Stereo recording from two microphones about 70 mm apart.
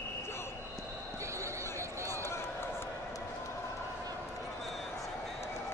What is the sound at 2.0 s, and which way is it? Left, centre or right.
Run, left.